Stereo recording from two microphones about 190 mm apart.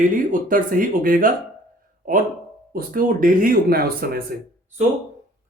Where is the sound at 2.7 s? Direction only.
45° right (ahead or behind).